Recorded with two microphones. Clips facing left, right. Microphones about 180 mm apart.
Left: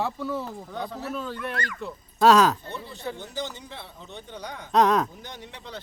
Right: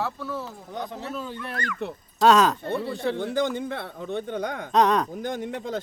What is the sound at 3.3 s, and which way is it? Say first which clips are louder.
Speech: right 9 dB; 55° right (ahead or behind).